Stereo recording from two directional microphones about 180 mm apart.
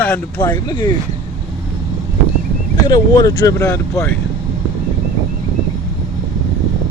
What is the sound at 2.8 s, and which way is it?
Speech, 20° left (ahead or behind).